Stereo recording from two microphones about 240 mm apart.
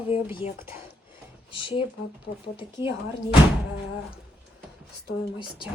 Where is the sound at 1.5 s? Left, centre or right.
Left.